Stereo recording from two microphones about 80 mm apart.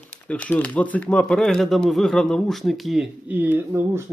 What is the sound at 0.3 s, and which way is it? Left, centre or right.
Speech, centre.